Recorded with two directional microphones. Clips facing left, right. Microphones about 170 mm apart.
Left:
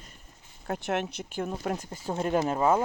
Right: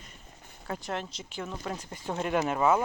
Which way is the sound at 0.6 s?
60° left (ahead or behind).